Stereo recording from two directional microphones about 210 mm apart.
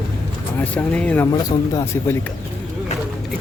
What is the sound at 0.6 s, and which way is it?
Speech, 5° left (ahead or behind).